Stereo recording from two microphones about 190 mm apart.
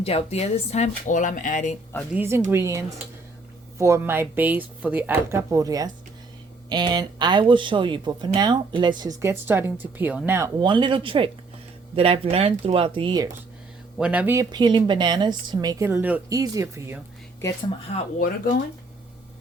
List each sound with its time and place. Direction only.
0.0 s speech: 30° left (ahead or behind)
2.1 s speech: 15° right (ahead or behind)
14.0 s speech: 5° right (ahead or behind)
14.5 s speech: 25° right (ahead or behind)
17.9 s speech: 35° left (ahead or behind)